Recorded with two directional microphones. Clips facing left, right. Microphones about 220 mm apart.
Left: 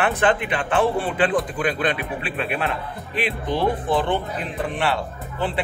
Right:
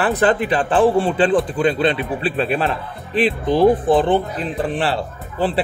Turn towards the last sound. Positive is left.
turn(degrees=-30)  # may be behind; listen again after turning